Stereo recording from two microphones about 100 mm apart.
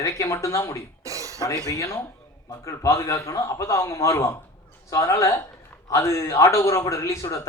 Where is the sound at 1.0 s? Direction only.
35° right (ahead or behind).